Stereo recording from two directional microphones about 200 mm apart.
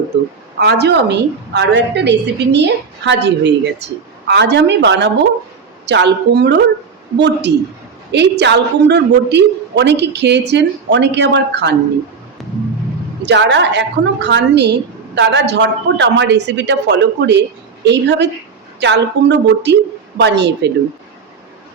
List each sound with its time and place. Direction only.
0.6 s a woman's voice: 55° right (ahead or behind)
13.2 s a woman's voice: 60° right (ahead or behind)